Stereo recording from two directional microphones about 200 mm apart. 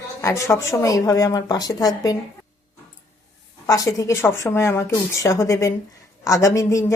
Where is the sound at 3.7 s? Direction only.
15° left (ahead or behind).